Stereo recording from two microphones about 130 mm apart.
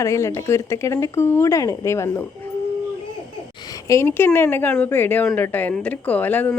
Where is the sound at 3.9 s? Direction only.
20° left (ahead or behind).